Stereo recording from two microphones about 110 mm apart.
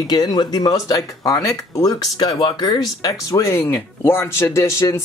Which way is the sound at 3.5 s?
25° left (ahead or behind).